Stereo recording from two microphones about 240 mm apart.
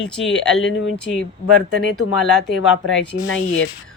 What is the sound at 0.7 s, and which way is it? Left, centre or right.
Speech, left.